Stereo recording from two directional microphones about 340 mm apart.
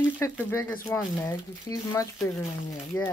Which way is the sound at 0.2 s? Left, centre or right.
Centre.